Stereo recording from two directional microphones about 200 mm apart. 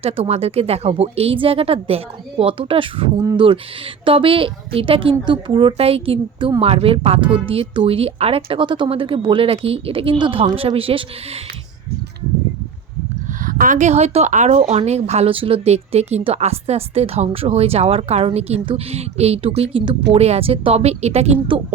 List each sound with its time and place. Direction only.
0.0 s a woman's voice: 30° right (ahead or behind)
13.4 s a woman's voice: 45° right (ahead or behind)